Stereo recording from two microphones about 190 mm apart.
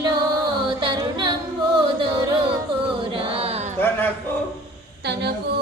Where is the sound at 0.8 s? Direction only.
25° right (ahead or behind).